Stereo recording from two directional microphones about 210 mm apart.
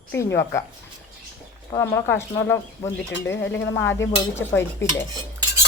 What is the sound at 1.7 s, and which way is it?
A woman's voice, 10° left (ahead or behind).